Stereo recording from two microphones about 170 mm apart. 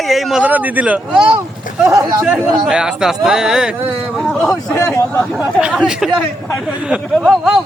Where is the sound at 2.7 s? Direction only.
5° right (ahead or behind).